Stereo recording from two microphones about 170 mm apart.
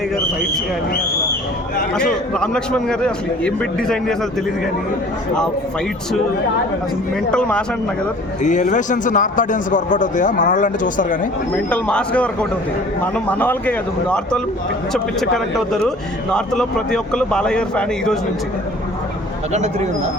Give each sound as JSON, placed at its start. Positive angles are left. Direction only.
{"t": 1.9, "sound": "a man's voice", "side_deg": 5}
{"t": 7.3, "sound": "speech", "side_deg": 5}
{"t": 8.4, "sound": "a man's voice", "side_deg": 45}
{"t": 11.5, "sound": "speech", "side_deg": 5}
{"t": 16.3, "sound": "a man's voice", "side_deg": 5}
{"t": 19.5, "sound": "speech", "side_deg": -40}